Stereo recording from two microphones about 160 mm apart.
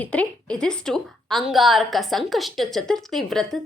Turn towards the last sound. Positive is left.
turn(degrees=0)  # may be behind; listen again after turning